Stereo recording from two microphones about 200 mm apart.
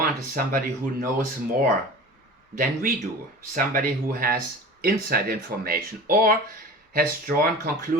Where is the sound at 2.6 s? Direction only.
45° right (ahead or behind).